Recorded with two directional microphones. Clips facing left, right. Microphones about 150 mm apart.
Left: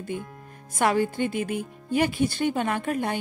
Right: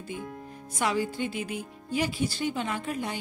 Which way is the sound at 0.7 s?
55° left (ahead or behind).